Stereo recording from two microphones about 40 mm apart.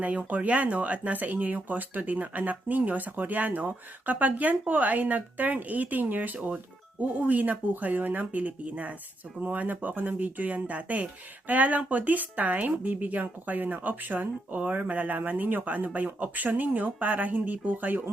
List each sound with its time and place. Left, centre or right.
0.0 s speech: right